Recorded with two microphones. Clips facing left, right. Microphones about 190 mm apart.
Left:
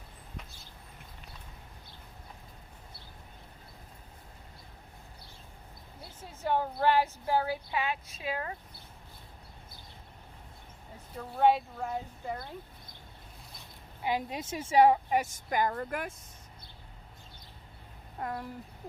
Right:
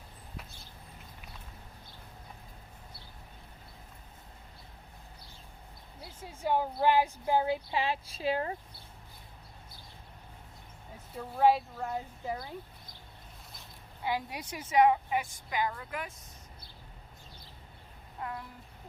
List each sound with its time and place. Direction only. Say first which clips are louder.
6.1 s speech: even; 10° right (ahead or behind); by 8.5 s 30° right (ahead or behind)
11.1 s speech: even; 5° right (ahead or behind)
14.0 s a woman's voice: left 2 dB; 20° left (ahead or behind); by 16.1 s 50° left (ahead or behind)
18.2 s speech: left 3 dB; 40° left (ahead or behind)